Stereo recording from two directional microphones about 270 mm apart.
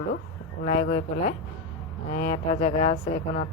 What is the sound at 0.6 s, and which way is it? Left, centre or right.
A woman's voice, left.